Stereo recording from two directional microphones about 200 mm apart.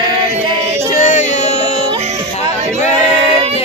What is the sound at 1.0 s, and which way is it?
Music, 40° left (ahead or behind).